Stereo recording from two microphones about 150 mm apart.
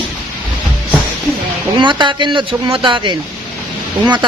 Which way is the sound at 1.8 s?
30° right (ahead or behind).